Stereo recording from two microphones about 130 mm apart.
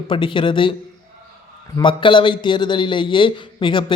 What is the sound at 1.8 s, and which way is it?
A man's voice, 40° left (ahead or behind).